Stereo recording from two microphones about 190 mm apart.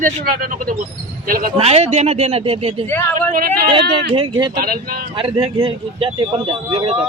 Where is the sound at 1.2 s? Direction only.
50° right (ahead or behind).